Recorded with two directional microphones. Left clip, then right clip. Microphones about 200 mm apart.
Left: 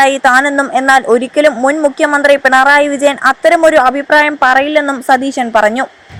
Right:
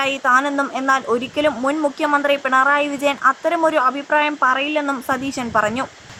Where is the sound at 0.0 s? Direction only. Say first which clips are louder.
Left 9 dB; 25° left (ahead or behind).